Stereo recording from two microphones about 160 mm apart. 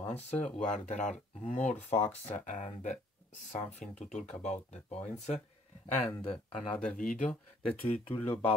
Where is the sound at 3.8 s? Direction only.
45° left (ahead or behind).